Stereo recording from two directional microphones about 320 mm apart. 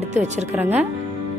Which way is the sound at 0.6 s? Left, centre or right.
Centre.